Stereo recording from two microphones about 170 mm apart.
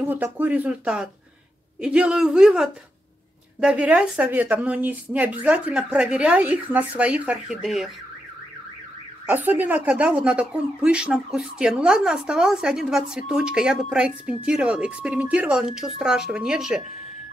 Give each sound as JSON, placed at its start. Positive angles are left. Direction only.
{"t": 0.0, "sound": "a woman's voice", "side_deg": -10}
{"t": 9.3, "sound": "a woman's voice", "side_deg": -10}